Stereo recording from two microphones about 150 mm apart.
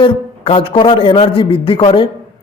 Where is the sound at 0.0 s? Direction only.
35° left (ahead or behind).